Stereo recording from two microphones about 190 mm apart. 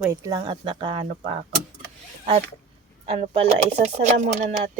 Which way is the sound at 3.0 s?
30° right (ahead or behind).